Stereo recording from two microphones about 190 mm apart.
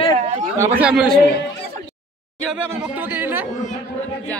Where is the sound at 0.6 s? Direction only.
5° right (ahead or behind).